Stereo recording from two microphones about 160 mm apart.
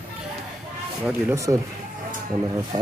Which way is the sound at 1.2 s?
20° right (ahead or behind).